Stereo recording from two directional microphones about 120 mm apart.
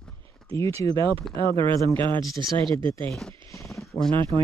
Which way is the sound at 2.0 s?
40° right (ahead or behind).